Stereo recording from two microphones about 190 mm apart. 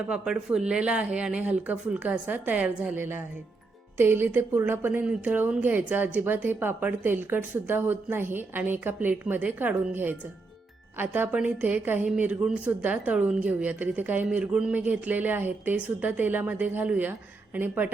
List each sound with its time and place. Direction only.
0.1 s a woman's voice: 5° right (ahead or behind)